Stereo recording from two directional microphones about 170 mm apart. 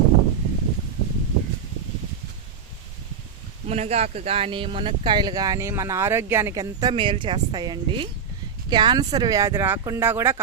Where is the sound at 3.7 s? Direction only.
40° right (ahead or behind).